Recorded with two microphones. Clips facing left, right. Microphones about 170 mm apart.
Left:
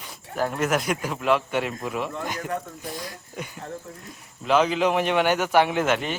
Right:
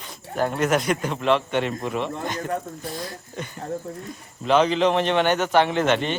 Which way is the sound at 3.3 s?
10° left (ahead or behind).